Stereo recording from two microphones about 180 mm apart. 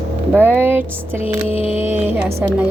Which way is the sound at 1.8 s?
10° right (ahead or behind).